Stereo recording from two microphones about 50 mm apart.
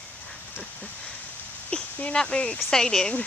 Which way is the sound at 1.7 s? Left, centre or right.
Left.